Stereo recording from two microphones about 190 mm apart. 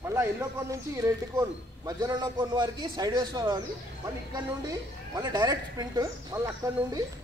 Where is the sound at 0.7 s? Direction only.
15° right (ahead or behind).